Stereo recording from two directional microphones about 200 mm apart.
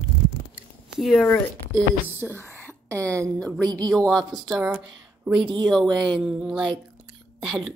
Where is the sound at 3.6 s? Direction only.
20° right (ahead or behind).